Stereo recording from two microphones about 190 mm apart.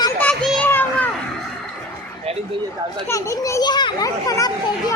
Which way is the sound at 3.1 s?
15° left (ahead or behind).